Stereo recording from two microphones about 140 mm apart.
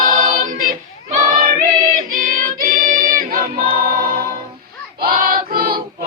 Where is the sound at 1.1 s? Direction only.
90° right.